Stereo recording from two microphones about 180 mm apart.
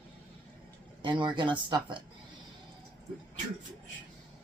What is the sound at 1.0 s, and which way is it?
Speech, 25° right (ahead or behind).